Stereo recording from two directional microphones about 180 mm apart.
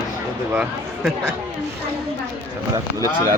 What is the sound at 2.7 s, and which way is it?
Speech, 20° right (ahead or behind).